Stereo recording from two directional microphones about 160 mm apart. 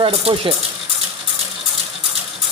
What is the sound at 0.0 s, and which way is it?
Speech, 35° right (ahead or behind).